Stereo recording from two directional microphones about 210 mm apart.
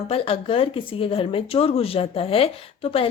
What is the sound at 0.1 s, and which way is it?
Speech, 25° left (ahead or behind).